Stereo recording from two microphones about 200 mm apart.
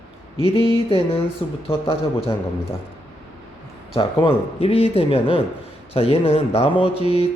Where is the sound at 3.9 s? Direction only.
25° left (ahead or behind).